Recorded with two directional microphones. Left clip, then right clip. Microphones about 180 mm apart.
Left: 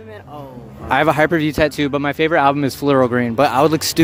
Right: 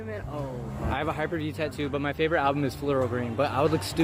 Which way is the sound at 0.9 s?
65° left (ahead or behind).